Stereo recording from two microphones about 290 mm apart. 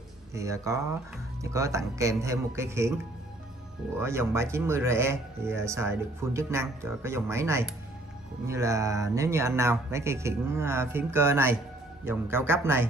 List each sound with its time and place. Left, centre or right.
0.3 s speech: centre
4.0 s speech: centre